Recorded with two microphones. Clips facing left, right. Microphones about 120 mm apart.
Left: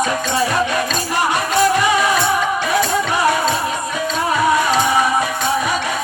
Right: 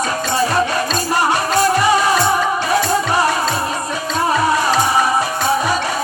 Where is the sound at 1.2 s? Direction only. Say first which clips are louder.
Left 1 dB; 35° right (ahead or behind).